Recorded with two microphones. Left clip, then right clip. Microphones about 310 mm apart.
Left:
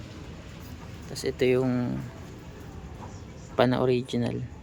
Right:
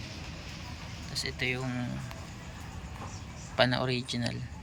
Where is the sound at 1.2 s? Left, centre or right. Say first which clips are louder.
Left 8 dB; centre.